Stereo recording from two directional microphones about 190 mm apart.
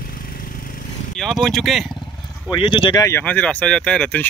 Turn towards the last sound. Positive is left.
turn(degrees=5)  # may be behind; listen again after turning